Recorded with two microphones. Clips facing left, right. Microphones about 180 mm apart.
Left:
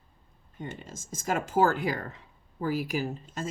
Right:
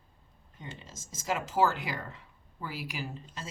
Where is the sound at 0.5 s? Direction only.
55° left (ahead or behind).